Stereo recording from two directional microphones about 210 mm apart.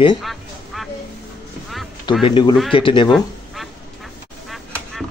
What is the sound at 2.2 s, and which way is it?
Speech, 20° left (ahead or behind).